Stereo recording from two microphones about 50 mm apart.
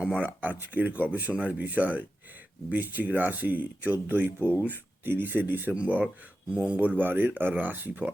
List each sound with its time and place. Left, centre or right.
0.4 s speech: right
6.5 s speech: right